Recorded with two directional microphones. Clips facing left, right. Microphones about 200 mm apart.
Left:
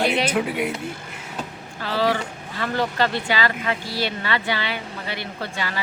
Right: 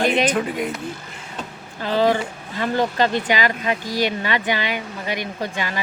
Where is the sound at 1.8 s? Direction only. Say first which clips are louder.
Right 4 dB; 20° right (ahead or behind).